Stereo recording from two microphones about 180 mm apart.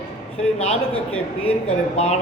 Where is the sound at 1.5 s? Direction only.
35° left (ahead or behind).